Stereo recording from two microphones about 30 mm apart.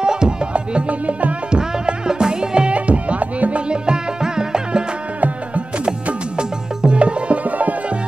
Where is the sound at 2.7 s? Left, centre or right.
Right.